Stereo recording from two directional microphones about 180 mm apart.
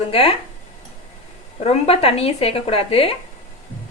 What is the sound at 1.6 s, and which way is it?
Speech, 35° left (ahead or behind).